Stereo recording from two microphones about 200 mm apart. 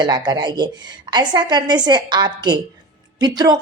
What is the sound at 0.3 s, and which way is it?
A woman's voice, 20° right (ahead or behind).